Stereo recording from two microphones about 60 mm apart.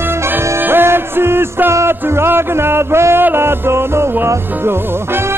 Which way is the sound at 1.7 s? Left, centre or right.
Right.